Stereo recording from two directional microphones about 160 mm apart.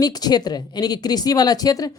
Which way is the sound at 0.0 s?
25° left (ahead or behind).